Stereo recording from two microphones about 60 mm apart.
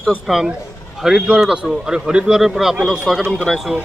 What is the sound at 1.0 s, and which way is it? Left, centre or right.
A man's voice, centre.